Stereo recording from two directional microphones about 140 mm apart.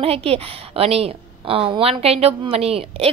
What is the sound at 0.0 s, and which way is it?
A woman's voice, 45° right (ahead or behind).